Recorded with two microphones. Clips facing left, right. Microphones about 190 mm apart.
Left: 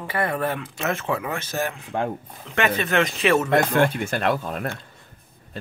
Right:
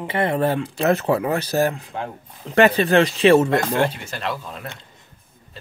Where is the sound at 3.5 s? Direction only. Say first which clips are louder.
Left 1 dB; 55° left (ahead or behind).